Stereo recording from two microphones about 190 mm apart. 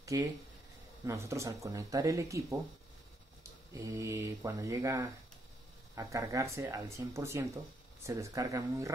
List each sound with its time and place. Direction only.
0.0 s speech: 15° right (ahead or behind)
3.7 s speech: 15° right (ahead or behind)